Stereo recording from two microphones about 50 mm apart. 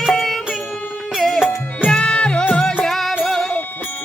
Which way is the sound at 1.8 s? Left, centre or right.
Left.